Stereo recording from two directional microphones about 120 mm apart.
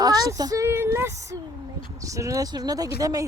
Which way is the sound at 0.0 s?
30° right (ahead or behind).